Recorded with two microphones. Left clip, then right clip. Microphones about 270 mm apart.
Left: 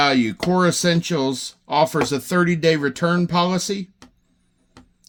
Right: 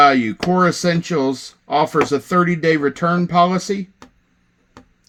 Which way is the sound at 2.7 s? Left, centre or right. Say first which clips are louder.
Right 3 dB; left.